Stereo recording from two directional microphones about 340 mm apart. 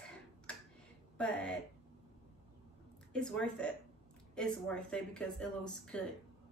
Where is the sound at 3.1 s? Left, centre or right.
Centre.